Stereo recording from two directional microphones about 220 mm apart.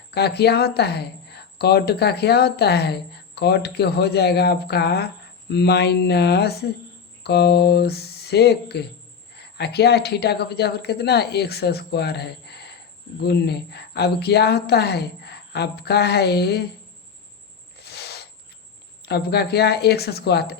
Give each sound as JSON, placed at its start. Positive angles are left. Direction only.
{"t": 0.1, "sound": "speech", "side_deg": 50}
{"t": 17.7, "sound": "owl", "side_deg": 50}
{"t": 19.0, "sound": "speech", "side_deg": 45}